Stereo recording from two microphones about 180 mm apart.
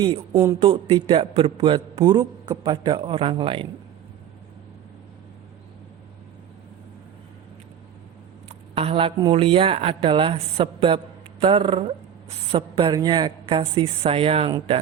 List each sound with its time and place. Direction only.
0.6 s a man's voice: 30° right (ahead or behind)
8.4 s a man's voice: 35° right (ahead or behind)